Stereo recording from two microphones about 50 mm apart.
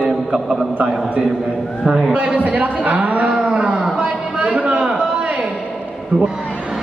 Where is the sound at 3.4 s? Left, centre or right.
Right.